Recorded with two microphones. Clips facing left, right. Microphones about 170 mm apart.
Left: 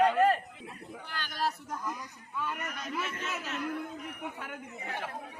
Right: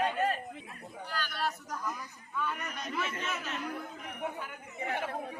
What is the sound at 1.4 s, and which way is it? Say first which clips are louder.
Speech: left 4 dB; 35° left (ahead or behind).